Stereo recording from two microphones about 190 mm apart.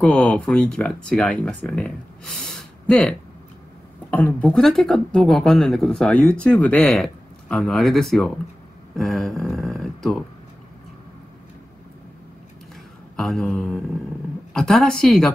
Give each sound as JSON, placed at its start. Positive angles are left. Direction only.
{"t": 0.0, "sound": "speech", "side_deg": 5}
{"t": 13.1, "sound": "speech", "side_deg": 5}